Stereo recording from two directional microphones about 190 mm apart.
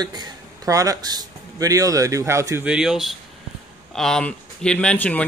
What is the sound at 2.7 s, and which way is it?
Speech, 5° right (ahead or behind).